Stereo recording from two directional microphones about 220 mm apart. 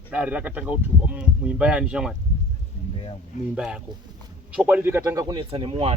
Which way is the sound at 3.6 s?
5° right (ahead or behind).